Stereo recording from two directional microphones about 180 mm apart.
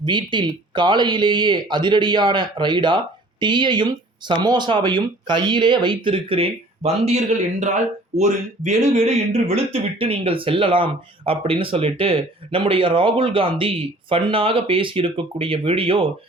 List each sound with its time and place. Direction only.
0.0 s speech: 25° right (ahead or behind)